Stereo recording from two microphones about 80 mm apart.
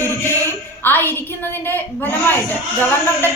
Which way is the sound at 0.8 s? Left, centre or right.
Left.